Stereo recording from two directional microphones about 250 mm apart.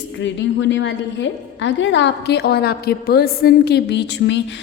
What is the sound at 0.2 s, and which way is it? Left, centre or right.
A woman's voice, left.